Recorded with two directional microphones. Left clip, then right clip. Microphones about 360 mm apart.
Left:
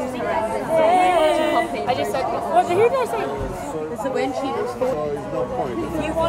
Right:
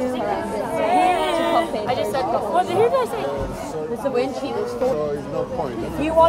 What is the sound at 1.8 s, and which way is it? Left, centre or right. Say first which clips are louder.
Speech: even; centre.